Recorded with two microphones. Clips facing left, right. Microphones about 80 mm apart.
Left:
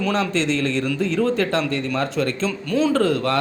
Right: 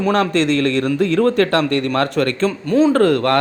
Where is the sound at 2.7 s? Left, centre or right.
Right.